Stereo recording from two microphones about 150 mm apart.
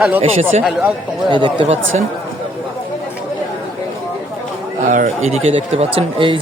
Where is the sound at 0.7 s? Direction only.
5° right (ahead or behind).